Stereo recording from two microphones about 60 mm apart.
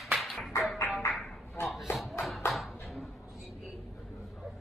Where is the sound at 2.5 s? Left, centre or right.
Centre.